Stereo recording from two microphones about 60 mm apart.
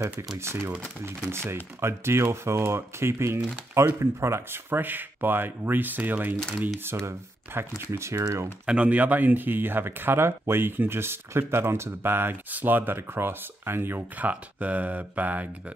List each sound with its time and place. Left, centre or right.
0.4 s speech: right
6.8 s speech: right
8.6 s speech: right